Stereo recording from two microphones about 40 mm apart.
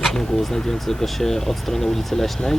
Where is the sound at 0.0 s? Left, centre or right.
Centre.